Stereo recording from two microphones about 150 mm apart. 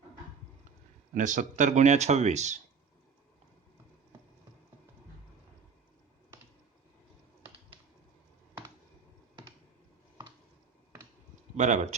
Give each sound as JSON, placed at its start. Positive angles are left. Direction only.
{"t": 1.1, "sound": "speech", "side_deg": -60}
{"t": 11.5, "sound": "speech", "side_deg": -50}